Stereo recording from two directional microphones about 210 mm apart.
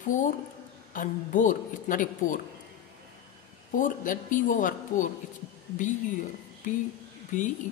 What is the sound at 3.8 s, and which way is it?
A woman's voice, 40° left (ahead or behind).